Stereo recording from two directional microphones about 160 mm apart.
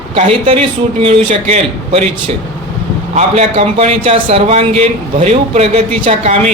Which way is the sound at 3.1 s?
45° right (ahead or behind).